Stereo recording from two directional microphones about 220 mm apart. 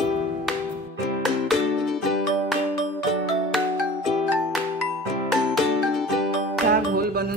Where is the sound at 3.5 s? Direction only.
Centre (ahead or behind).